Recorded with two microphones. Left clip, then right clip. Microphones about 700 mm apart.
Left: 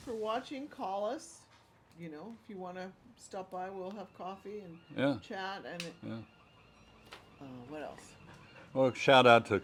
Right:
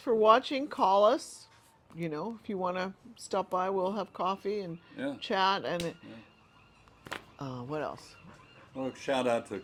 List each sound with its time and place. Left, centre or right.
0.1 s speech: right
7.3 s speech: right
8.7 s speech: left